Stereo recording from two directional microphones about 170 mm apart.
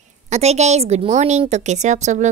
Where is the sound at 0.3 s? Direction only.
40° right (ahead or behind).